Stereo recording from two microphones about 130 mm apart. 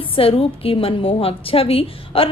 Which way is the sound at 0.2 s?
45° left (ahead or behind).